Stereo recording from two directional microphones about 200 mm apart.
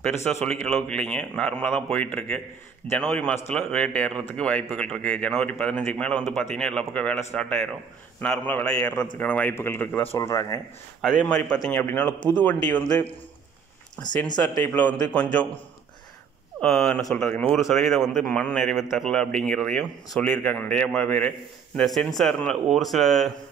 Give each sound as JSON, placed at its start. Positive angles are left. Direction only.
{"t": 0.0, "sound": "a man's voice", "side_deg": 5}
{"t": 11.0, "sound": "a man's voice", "side_deg": 5}
{"t": 14.0, "sound": "speech", "side_deg": 20}
{"t": 14.5, "sound": "a man's voice", "side_deg": 10}
{"t": 16.6, "sound": "a man's voice", "side_deg": 5}